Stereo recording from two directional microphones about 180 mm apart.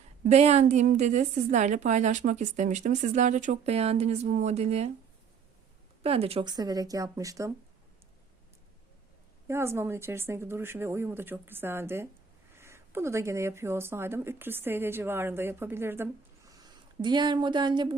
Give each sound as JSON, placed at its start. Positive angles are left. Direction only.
{"t": 0.3, "sound": "a woman's voice", "side_deg": -35}
{"t": 6.0, "sound": "speech", "side_deg": -35}
{"t": 9.5, "sound": "speech", "side_deg": -15}